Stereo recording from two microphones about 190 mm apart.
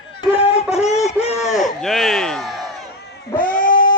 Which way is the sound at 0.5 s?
35° left (ahead or behind).